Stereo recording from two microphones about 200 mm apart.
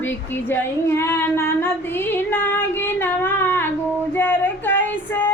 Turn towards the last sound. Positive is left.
turn(degrees=10)  # may be behind; listen again after turning